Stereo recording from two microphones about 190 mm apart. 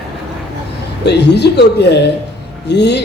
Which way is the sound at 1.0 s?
60° left (ahead or behind).